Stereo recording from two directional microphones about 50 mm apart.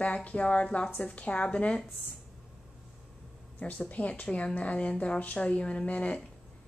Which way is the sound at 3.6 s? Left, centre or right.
Left.